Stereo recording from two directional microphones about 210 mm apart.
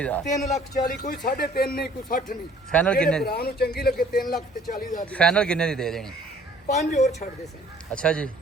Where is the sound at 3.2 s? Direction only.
45° left (ahead or behind).